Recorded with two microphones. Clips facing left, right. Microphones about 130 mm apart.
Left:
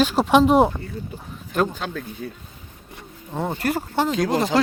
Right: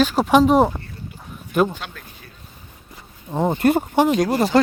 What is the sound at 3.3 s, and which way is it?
Speech, 20° right (ahead or behind).